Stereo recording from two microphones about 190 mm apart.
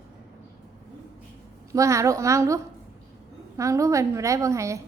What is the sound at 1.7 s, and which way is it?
A woman's voice, 15° right (ahead or behind).